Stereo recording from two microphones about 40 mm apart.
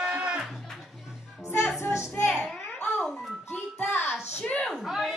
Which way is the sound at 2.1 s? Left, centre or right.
Left.